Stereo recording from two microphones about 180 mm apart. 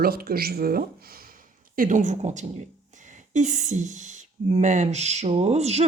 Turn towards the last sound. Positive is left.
turn(degrees=-35)  # may be behind; listen again after turning